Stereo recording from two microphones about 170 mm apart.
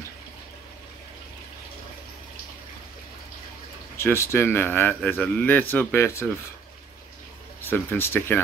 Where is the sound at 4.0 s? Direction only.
15° left (ahead or behind).